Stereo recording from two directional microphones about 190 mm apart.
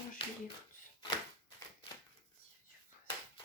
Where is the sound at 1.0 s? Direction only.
25° left (ahead or behind).